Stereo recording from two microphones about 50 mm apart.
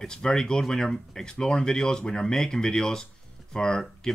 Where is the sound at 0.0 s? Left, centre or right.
Centre.